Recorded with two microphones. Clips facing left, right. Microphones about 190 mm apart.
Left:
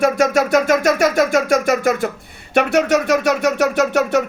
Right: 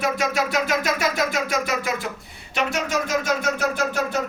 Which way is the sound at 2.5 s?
65° left (ahead or behind).